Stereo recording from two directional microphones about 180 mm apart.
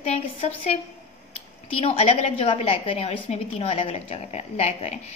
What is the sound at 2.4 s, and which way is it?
A woman's voice, 35° left (ahead or behind).